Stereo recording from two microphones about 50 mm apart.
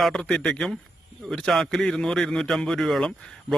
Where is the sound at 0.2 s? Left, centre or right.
Centre.